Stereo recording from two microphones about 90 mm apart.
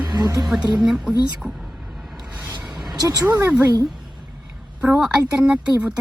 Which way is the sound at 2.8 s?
45° right (ahead or behind).